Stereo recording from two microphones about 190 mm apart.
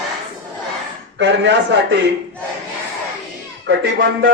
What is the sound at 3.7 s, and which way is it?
Speech, 60° right (ahead or behind).